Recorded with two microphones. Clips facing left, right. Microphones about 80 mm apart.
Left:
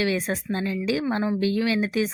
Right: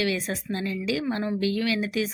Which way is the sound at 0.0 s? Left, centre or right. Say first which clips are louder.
Left 2 dB; left.